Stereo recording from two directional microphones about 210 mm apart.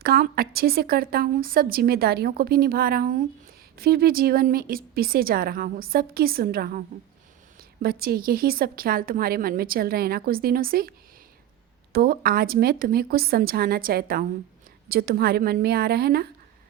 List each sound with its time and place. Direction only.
0.0 s a woman's voice: 45° right (ahead or behind)